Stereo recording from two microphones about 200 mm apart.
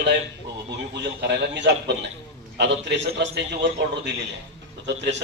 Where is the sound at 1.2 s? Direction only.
60° right (ahead or behind).